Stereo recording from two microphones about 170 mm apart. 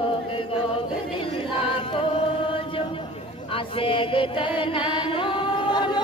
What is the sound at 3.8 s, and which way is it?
Chant, 30° left (ahead or behind).